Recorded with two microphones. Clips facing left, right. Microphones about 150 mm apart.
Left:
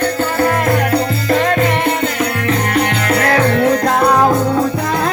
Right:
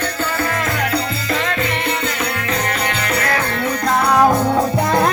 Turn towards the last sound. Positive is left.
turn(degrees=90)